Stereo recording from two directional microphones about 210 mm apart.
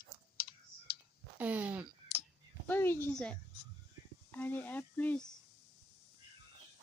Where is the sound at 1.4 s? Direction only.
10° right (ahead or behind).